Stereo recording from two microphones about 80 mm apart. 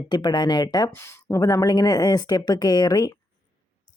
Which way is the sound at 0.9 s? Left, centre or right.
Left.